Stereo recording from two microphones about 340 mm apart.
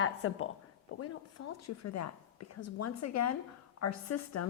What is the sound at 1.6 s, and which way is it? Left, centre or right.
A woman's voice, left.